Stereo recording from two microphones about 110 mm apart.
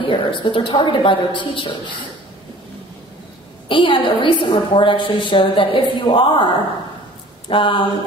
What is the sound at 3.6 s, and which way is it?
A woman's voice, 50° left (ahead or behind).